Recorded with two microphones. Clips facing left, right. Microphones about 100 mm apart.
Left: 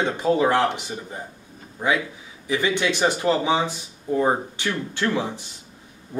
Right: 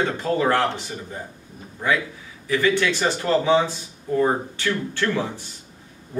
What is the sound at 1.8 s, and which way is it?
Speech, 20° left (ahead or behind).